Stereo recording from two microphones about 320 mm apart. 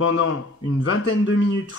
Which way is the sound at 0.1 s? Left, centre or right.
Left.